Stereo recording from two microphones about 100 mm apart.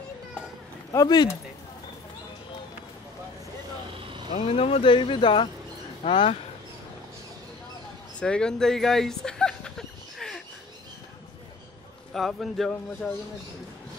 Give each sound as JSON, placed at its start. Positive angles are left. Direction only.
{"t": 0.9, "sound": "speech", "side_deg": 40}
{"t": 4.3, "sound": "speech", "side_deg": 80}
{"t": 8.2, "sound": "a sound", "side_deg": 10}
{"t": 12.1, "sound": "speech", "side_deg": 0}